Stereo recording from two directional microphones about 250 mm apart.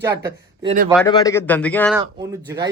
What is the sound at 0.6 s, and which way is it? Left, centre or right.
Speech, right.